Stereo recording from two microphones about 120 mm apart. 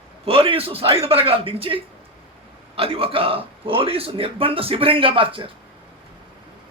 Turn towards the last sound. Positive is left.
turn(degrees=-45)  # may be behind; listen again after turning